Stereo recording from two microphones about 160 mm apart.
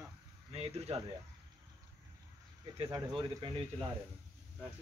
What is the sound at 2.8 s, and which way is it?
Speech, 30° right (ahead or behind).